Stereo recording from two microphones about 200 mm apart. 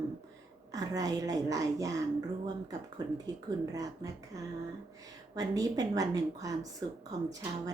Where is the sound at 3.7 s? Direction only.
15° right (ahead or behind).